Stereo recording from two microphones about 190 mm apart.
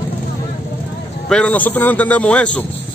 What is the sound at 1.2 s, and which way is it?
Speech, 5° left (ahead or behind).